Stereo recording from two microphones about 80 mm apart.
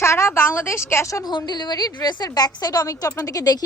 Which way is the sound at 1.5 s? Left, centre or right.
Left.